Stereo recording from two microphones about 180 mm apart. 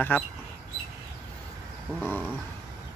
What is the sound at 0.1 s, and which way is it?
Speech, 10° left (ahead or behind).